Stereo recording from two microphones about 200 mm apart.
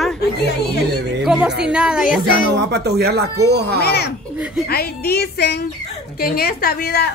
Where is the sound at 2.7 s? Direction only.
55° right (ahead or behind).